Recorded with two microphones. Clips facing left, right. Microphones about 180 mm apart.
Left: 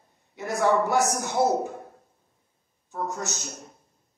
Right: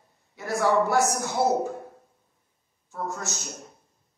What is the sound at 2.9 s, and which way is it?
Speech, 20° left (ahead or behind).